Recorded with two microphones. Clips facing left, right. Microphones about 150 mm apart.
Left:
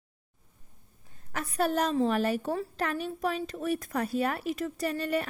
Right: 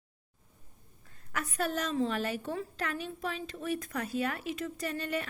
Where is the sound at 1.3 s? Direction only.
30° left (ahead or behind).